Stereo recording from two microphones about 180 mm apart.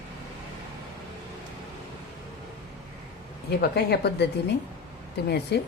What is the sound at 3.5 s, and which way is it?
Speech, 65° left (ahead or behind).